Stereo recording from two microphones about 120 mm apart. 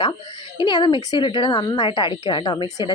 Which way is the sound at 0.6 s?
40° left (ahead or behind).